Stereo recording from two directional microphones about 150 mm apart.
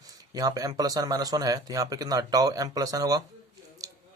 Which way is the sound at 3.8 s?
25° right (ahead or behind).